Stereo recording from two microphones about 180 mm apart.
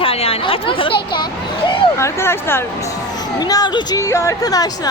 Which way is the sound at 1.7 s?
15° left (ahead or behind).